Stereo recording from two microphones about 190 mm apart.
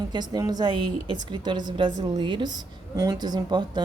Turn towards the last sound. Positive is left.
turn(degrees=-20)  # may be behind; listen again after turning